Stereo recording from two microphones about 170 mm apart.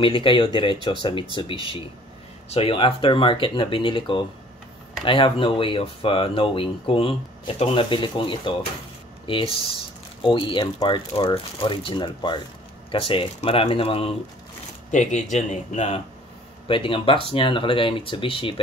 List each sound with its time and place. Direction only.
0.0 s speech: 30° left (ahead or behind)
14.9 s speech: 45° left (ahead or behind)
16.6 s speech: 30° left (ahead or behind)